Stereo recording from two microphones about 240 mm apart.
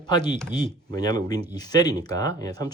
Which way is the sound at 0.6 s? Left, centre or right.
Centre.